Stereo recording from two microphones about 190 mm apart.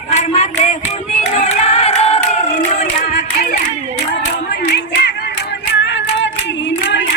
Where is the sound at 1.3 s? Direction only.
35° left (ahead or behind).